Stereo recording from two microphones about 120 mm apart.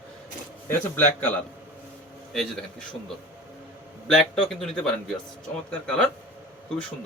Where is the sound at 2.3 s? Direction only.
5° left (ahead or behind).